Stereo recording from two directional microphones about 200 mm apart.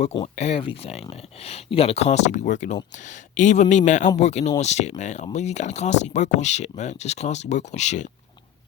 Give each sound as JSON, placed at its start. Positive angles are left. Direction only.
{"t": 0.0, "sound": "speech", "side_deg": 35}